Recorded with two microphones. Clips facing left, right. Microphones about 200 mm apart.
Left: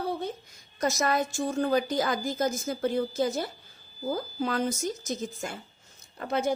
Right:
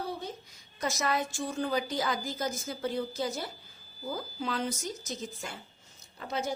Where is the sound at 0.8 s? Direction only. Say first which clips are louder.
Left 4 dB; 45° left (ahead or behind).